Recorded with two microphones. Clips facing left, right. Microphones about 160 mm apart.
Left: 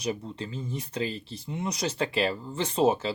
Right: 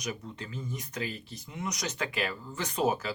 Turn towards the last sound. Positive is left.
turn(degrees=25)  # may be behind; listen again after turning